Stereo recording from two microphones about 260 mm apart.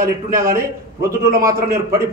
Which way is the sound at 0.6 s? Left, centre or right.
Centre.